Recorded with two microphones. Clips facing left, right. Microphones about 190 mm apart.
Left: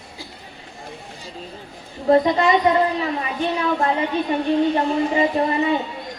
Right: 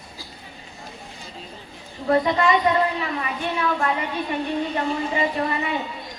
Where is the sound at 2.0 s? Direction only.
25° left (ahead or behind).